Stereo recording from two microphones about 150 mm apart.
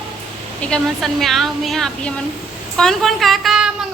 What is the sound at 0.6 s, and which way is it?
A woman's voice, 5° left (ahead or behind).